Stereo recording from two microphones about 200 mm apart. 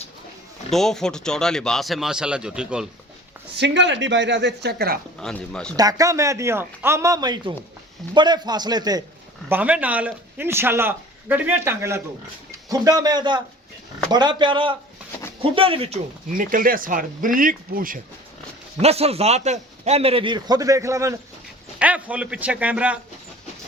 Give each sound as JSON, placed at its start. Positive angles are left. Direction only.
{"t": 0.7, "sound": "speech", "side_deg": 0}
{"t": 3.6, "sound": "speech", "side_deg": -60}
{"t": 5.2, "sound": "speech", "side_deg": 5}
{"t": 5.7, "sound": "a man's voice", "side_deg": -15}
{"t": 9.5, "sound": "a man's voice", "side_deg": -5}
{"t": 16.4, "sound": "speech", "side_deg": -45}
{"t": 18.8, "sound": "a man's voice", "side_deg": -30}